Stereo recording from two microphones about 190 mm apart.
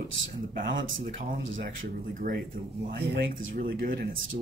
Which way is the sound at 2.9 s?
60° right (ahead or behind).